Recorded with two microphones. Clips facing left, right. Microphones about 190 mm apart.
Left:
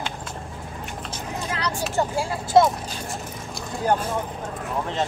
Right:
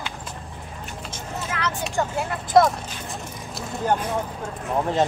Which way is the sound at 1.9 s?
30° left (ahead or behind).